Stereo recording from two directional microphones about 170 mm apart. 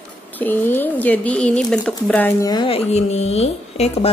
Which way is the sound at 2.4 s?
30° left (ahead or behind).